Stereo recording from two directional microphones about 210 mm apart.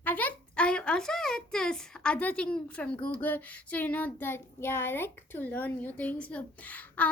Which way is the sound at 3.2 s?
10° left (ahead or behind).